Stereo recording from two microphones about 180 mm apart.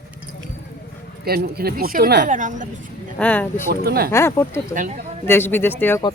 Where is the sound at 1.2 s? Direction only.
60° right (ahead or behind).